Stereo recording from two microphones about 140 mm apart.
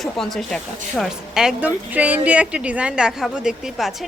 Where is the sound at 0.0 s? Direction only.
5° left (ahead or behind).